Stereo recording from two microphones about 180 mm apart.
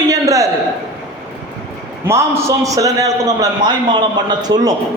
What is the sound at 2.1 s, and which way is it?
A man's voice, 15° right (ahead or behind).